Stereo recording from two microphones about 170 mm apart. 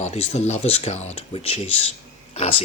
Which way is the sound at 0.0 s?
40° left (ahead or behind).